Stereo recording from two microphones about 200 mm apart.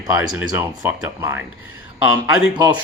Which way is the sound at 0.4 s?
10° right (ahead or behind).